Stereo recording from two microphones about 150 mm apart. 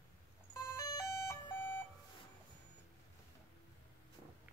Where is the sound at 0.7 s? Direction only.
20° left (ahead or behind).